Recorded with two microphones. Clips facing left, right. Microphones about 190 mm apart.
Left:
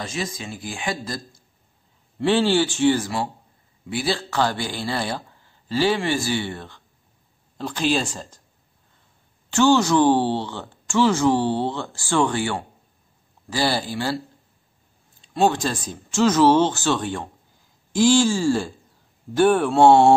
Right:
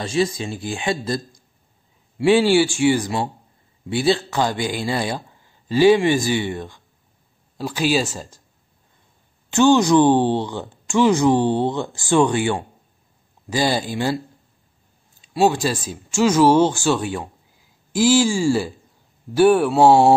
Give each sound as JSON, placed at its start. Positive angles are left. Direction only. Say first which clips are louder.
{"t": 0.0, "sound": "speech", "louder": "right 8 dB", "side_deg": -30}
{"t": 2.1, "sound": "speech", "louder": "right 4 dB", "side_deg": -10}
{"t": 9.5, "sound": "speech", "louder": "right 3 dB", "side_deg": -15}
{"t": 15.3, "sound": "speech", "louder": "right 2 dB", "side_deg": -10}
{"t": 19.3, "sound": "mantra", "louder": "right 3 dB", "side_deg": -10}